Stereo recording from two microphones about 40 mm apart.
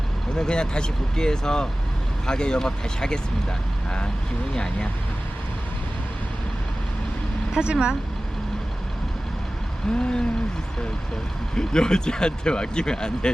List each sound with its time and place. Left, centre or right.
0.3 s speech: centre
4.5 s speech: left
7.6 s speech: right
10.0 s speech: centre
11.5 s speech: centre